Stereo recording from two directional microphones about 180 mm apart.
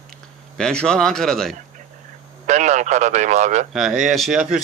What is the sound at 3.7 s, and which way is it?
Speech, centre (ahead or behind).